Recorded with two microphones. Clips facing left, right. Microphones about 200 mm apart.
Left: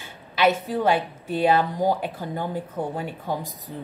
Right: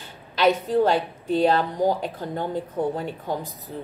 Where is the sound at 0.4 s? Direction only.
10° left (ahead or behind).